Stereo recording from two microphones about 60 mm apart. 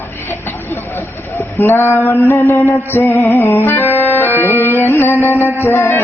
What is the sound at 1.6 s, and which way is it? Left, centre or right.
Speech, left.